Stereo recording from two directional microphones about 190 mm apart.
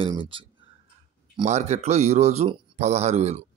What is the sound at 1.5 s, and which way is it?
A man's voice, 35° right (ahead or behind).